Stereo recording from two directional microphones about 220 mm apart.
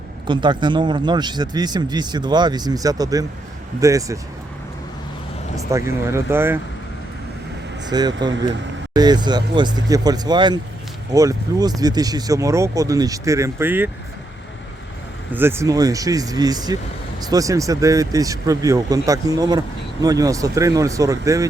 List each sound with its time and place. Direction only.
0.3 s speech: 20° right (ahead or behind)
5.7 s speech: 15° right (ahead or behind)
7.9 s speech: 20° right (ahead or behind)
15.3 s speech: 10° right (ahead or behind)